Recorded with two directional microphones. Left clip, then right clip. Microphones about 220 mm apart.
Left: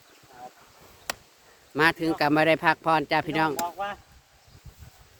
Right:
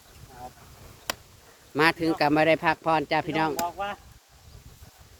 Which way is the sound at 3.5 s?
5° left (ahead or behind).